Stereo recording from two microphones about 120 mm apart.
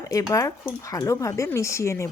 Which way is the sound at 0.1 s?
30° left (ahead or behind).